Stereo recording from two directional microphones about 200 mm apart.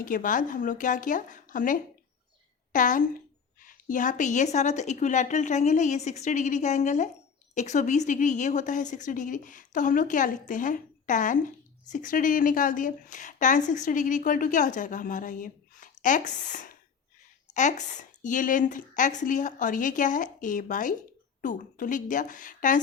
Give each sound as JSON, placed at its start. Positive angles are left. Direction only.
{"t": 0.0, "sound": "speech", "side_deg": 40}